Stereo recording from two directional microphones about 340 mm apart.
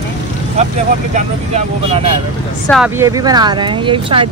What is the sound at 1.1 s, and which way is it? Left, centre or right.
Speech, centre.